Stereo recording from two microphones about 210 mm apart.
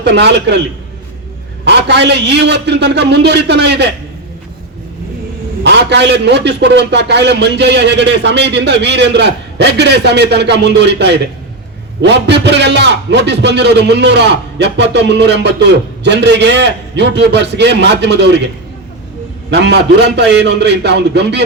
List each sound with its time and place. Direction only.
0.0 s a man's voice: 55° right (ahead or behind)
1.6 s a man's voice: 55° right (ahead or behind)
5.6 s a man's voice: 55° right (ahead or behind)
19.5 s a man's voice: 55° right (ahead or behind)